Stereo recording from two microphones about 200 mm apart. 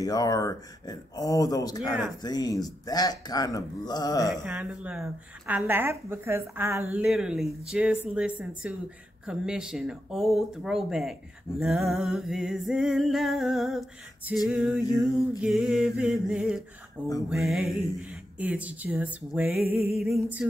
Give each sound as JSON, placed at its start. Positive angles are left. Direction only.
{"t": 0.0, "sound": "speech", "side_deg": 20}
{"t": 4.3, "sound": "music", "side_deg": 0}
{"t": 5.5, "sound": "speech", "side_deg": -10}
{"t": 8.6, "sound": "music", "side_deg": -5}
{"t": 17.3, "sound": "speech", "side_deg": 0}